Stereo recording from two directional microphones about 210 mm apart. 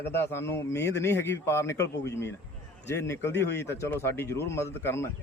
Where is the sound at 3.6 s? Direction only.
10° left (ahead or behind).